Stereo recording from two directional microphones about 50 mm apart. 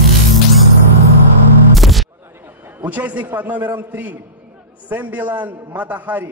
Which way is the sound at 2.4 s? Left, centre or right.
Right.